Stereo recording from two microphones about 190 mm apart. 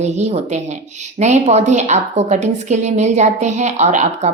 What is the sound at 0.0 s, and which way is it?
A woman's voice, 35° right (ahead or behind).